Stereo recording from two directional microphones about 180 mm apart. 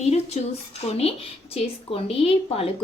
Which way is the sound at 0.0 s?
35° left (ahead or behind).